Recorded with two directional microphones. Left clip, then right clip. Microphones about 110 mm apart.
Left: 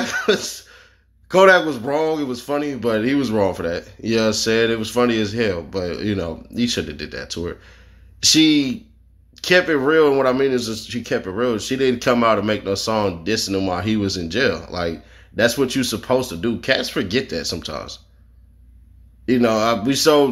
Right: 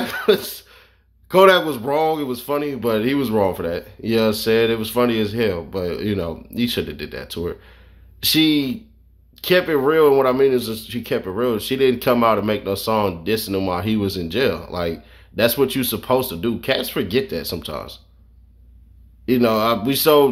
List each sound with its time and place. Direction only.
0.0 s cough: 40° right (ahead or behind)
1.3 s speech: 40° right (ahead or behind)
19.2 s speech: 35° right (ahead or behind)